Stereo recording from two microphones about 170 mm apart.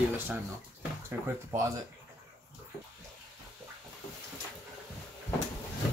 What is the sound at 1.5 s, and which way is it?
Speech, 20° right (ahead or behind).